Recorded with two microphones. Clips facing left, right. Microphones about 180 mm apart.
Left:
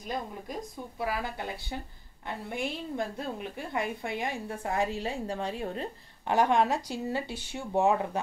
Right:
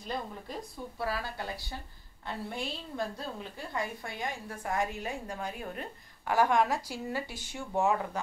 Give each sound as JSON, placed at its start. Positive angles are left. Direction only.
{"t": 0.1, "sound": "a woman's voice", "side_deg": 15}